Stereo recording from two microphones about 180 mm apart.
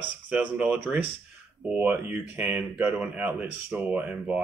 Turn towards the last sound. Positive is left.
turn(degrees=-10)  # may be behind; listen again after turning